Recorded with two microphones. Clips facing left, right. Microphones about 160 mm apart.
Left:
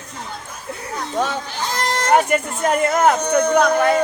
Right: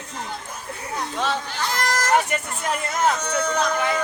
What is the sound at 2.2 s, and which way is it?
Speech, 45° left (ahead or behind).